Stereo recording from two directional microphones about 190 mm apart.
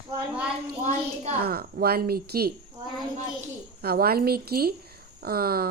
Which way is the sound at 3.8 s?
55° right (ahead or behind).